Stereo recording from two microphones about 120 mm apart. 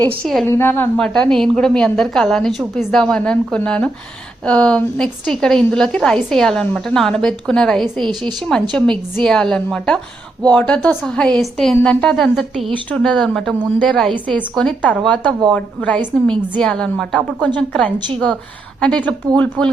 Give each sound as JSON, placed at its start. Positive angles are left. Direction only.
{"t": 0.4, "sound": "a woman's voice", "side_deg": 20}
{"t": 0.9, "sound": "a woman's voice", "side_deg": 5}